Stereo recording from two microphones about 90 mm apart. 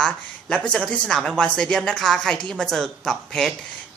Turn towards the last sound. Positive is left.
turn(degrees=5)  # may be behind; listen again after turning